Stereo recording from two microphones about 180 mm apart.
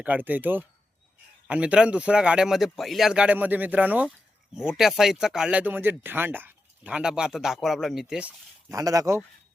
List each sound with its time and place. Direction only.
0.0 s speech: 10° right (ahead or behind)
8.7 s speech: 20° right (ahead or behind)